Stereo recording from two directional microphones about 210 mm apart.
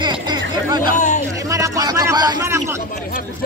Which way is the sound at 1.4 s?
15° right (ahead or behind).